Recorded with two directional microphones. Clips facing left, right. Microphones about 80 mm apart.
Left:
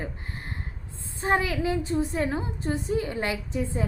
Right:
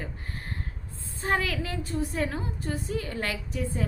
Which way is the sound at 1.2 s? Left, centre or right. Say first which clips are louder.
Left 3 dB; left.